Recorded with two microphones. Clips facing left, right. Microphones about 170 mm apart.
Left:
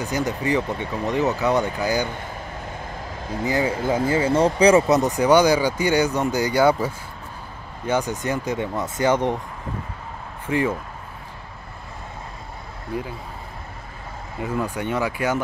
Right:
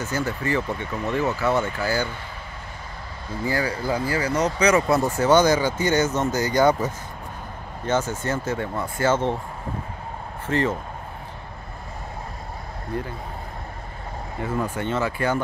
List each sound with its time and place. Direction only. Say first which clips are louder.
0.0 s speech: left 2 dB; 15° left (ahead or behind)
3.4 s speech: left 3 dB; 20° left (ahead or behind)
10.4 s speech: left 1 dB; 10° left (ahead or behind)
12.9 s speech: left 1 dB; 10° left (ahead or behind)
14.4 s speech: left 1 dB; 10° left (ahead or behind)